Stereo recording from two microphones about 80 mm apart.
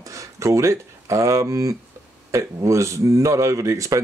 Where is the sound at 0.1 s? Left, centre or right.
Right.